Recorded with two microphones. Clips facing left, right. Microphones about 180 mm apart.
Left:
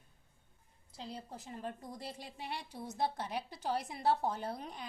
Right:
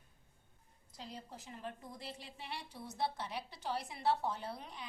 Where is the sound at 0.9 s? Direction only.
35° left (ahead or behind).